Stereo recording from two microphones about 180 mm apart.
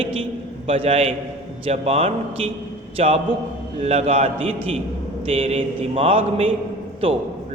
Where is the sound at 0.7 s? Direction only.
35° right (ahead or behind).